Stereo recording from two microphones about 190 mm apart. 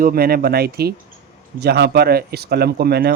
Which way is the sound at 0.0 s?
50° right (ahead or behind).